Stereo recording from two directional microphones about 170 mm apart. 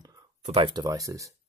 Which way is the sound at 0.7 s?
25° right (ahead or behind).